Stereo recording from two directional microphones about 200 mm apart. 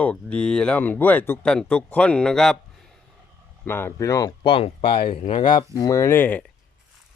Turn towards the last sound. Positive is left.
turn(degrees=10)  # may be behind; listen again after turning